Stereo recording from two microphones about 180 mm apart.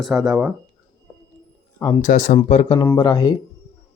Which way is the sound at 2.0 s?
45° left (ahead or behind).